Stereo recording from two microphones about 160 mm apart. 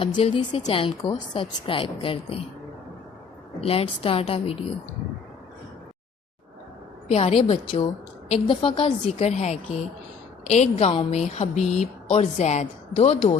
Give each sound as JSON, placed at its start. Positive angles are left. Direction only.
{"t": 0.0, "sound": "a woman's voice", "side_deg": 35}
{"t": 3.6, "sound": "a woman's voice", "side_deg": 35}
{"t": 7.1, "sound": "a woman's voice", "side_deg": 35}